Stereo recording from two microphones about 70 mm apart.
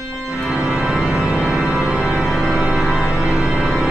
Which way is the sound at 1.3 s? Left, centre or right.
Centre.